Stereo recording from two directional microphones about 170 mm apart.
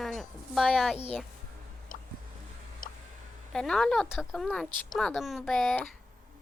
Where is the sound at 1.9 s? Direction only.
50° left (ahead or behind).